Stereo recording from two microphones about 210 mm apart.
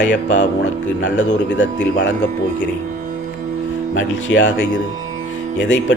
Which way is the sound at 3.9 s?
65° left (ahead or behind).